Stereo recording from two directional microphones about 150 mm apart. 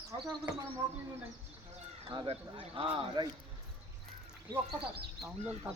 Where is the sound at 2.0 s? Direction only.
35° right (ahead or behind).